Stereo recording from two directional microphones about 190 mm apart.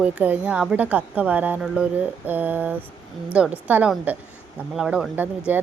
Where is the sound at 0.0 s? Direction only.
5° right (ahead or behind).